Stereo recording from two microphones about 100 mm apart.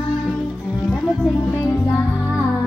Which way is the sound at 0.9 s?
15° left (ahead or behind).